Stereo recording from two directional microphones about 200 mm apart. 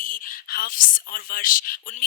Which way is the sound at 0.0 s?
45° left (ahead or behind).